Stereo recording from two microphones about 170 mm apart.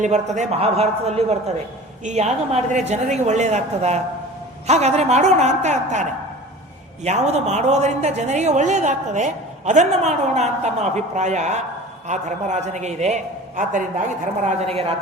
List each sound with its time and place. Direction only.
0.0 s a man's voice: 45° right (ahead or behind)